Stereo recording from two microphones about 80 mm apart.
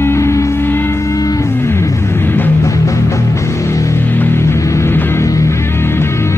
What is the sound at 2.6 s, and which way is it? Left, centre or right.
Music, left.